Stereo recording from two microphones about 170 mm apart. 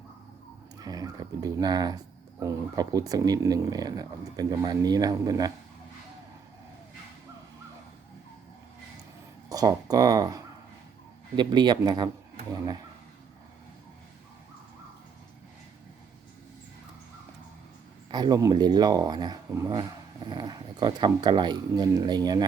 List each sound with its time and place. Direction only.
0.8 s speech: 20° right (ahead or behind)
9.5 s speech: 20° right (ahead or behind)
18.1 s speech: 25° right (ahead or behind)